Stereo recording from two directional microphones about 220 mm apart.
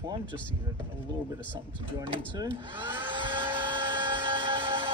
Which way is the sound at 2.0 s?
15° right (ahead or behind).